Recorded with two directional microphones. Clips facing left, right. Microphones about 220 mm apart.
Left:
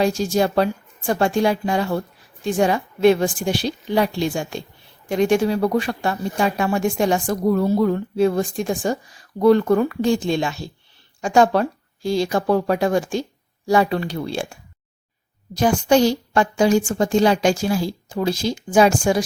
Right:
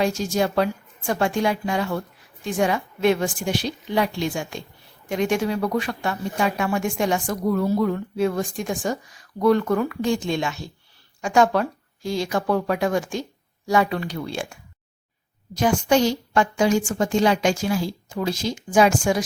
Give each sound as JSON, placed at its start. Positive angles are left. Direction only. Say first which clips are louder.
{"t": 0.0, "sound": "speech", "louder": "left 3 dB", "side_deg": 35}